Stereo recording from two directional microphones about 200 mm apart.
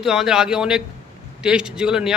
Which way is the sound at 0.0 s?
Centre (ahead or behind).